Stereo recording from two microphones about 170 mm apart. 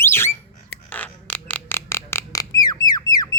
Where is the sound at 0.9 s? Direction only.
10° left (ahead or behind).